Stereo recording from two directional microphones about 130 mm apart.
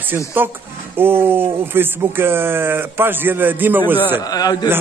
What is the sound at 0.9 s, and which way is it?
A man's voice, 15° right (ahead or behind).